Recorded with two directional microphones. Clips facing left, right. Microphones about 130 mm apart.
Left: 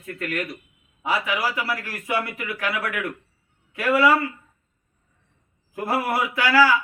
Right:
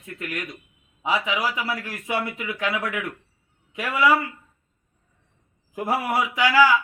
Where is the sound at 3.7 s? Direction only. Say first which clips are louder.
Left 3 dB; 15° right (ahead or behind).